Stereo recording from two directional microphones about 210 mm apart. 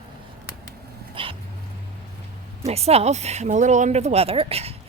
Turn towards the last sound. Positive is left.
turn(degrees=-30)  # may be behind; listen again after turning